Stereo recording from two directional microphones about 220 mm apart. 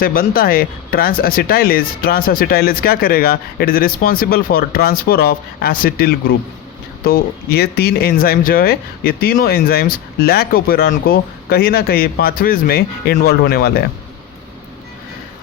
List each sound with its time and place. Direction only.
0.0 s speech: 40° left (ahead or behind)